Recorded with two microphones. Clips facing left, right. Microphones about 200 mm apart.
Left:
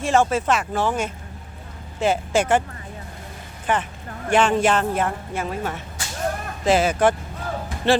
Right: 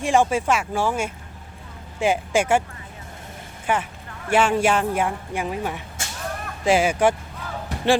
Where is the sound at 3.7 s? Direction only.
10° right (ahead or behind).